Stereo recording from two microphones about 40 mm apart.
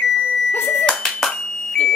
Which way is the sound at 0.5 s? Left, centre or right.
Left.